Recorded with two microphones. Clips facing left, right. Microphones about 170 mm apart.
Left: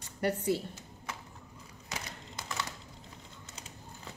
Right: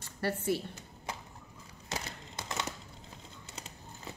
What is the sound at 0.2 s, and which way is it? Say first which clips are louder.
Speech: left 2 dB; 20° left (ahead or behind).